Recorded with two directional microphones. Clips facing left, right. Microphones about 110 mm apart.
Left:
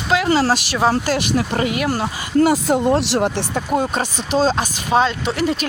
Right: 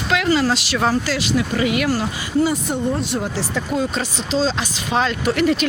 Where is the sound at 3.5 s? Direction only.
45° left (ahead or behind).